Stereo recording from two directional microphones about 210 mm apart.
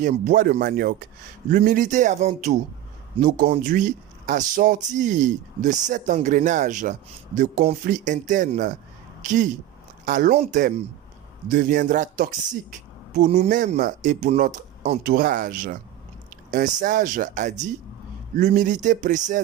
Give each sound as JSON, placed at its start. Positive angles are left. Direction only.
{"t": 0.0, "sound": "speech", "side_deg": -45}